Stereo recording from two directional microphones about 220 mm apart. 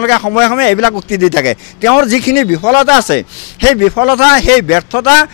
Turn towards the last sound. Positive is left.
turn(degrees=20)  # may be behind; listen again after turning